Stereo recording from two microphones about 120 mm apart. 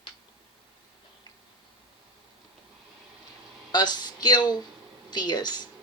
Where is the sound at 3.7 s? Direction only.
35° left (ahead or behind).